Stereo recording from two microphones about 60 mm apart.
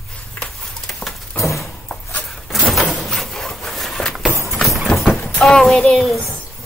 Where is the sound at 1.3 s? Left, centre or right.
Left.